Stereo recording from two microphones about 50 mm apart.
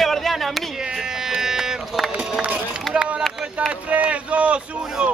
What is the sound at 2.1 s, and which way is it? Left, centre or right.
Run, centre.